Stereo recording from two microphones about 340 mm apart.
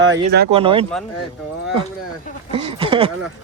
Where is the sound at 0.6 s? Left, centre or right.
Centre.